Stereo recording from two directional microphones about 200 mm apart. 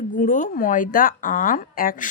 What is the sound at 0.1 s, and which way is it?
A woman's voice, 40° left (ahead or behind).